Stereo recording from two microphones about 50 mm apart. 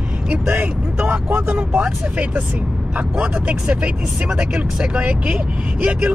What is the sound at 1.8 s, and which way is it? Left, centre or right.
Speech, right.